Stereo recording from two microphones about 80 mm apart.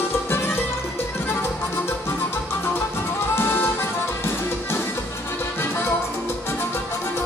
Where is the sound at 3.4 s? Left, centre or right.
Left.